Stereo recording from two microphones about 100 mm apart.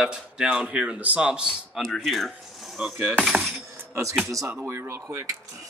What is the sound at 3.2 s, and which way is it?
Coin, centre (ahead or behind).